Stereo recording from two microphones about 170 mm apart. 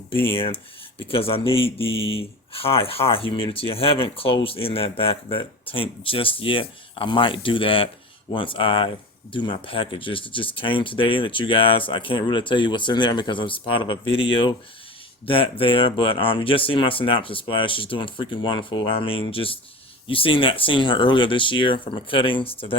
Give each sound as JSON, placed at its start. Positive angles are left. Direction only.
{"t": 0.3, "sound": "speech", "side_deg": 30}